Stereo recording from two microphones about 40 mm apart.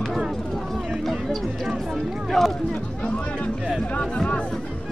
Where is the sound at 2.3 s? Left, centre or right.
Centre.